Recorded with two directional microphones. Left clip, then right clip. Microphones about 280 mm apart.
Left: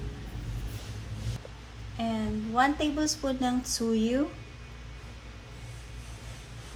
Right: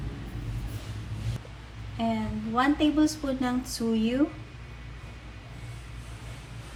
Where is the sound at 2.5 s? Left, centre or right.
Left.